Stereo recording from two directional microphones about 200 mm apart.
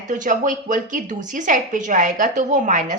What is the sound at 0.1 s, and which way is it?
A woman's voice, 40° right (ahead or behind).